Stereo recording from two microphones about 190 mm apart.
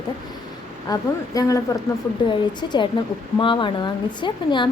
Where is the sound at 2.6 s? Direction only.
25° left (ahead or behind).